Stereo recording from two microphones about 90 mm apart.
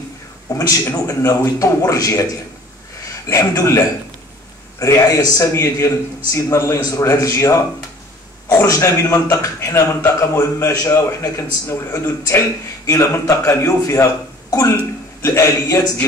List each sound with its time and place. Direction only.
0.6 s a man's voice: 40° left (ahead or behind)
3.3 s a man's voice: 35° left (ahead or behind)
15.2 s a man's voice: 35° left (ahead or behind)